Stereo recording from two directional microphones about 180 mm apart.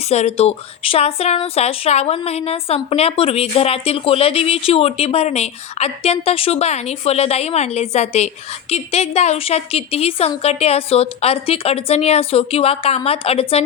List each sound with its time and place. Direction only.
0.1 s a woman's voice: 35° left (ahead or behind)